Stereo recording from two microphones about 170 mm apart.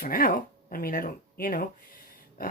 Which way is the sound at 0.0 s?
55° left (ahead or behind).